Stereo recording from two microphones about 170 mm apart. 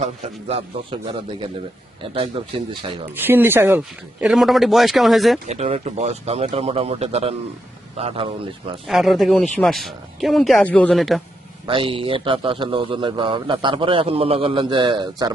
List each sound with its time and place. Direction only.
0.0 s a man's voice: 35° right (ahead or behind)
3.2 s speech: 10° right (ahead or behind)
5.5 s a man's voice: 40° right (ahead or behind)
8.9 s speech: centre (ahead or behind)
11.6 s a man's voice: 30° right (ahead or behind)